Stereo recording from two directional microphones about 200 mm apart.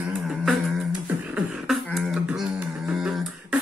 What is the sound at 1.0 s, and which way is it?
Beatboxing, 5° right (ahead or behind).